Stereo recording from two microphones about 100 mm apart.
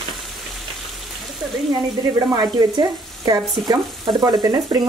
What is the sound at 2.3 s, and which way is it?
Speech, 40° right (ahead or behind).